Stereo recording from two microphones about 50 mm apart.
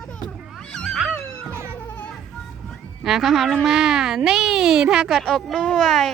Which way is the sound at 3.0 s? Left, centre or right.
Centre.